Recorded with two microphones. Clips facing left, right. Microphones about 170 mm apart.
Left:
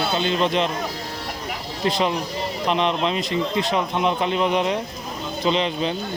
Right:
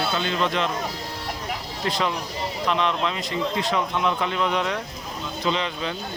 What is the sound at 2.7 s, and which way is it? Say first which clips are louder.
A man's voice: left 3 dB; 20° left (ahead or behind).